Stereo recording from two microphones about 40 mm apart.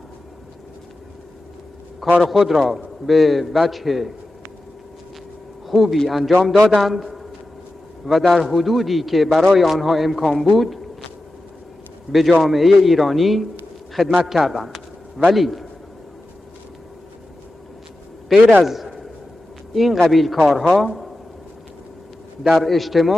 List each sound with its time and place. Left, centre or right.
2.0 s a man's voice: centre
5.7 s a man's voice: centre
6.5 s a man's voice: centre
6.8 s a man's voice: centre
10.4 s a sound: centre
12.1 s a man's voice: centre
18.6 s a sound: centre
19.7 s a man's voice: centre
22.5 s a man's voice: centre